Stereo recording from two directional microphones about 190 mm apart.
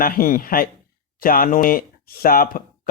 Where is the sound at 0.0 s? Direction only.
45° left (ahead or behind).